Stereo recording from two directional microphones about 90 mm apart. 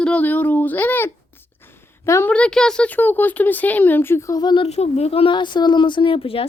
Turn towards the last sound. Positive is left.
turn(degrees=90)